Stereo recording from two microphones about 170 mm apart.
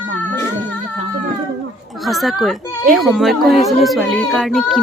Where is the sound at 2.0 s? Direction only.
Centre (ahead or behind).